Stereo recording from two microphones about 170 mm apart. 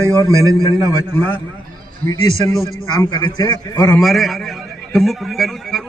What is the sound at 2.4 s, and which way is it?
A man's voice, 15° left (ahead or behind).